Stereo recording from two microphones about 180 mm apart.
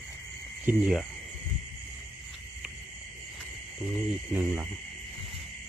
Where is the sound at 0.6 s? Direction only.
5° right (ahead or behind).